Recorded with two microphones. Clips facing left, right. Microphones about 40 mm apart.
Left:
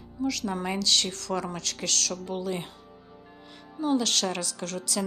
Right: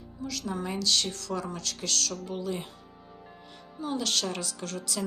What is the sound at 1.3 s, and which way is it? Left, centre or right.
Speech, left.